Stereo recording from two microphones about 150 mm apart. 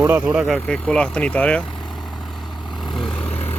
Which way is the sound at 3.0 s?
40° left (ahead or behind).